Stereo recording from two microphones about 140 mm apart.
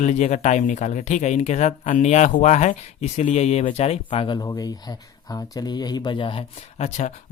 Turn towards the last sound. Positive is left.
turn(degrees=40)  # may be behind; listen again after turning